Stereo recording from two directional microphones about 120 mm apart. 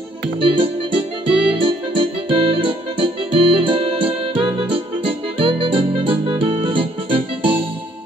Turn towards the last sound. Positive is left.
turn(degrees=-45)  # may be behind; listen again after turning